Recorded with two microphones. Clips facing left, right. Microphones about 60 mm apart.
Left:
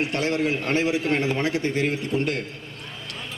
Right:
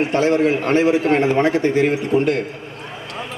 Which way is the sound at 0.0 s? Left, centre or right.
Centre.